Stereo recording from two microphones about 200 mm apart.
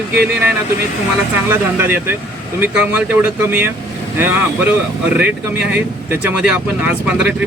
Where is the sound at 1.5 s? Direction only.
10° right (ahead or behind).